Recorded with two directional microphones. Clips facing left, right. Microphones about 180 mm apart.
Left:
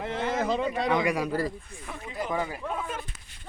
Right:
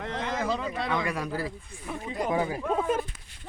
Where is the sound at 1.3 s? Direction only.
5° right (ahead or behind).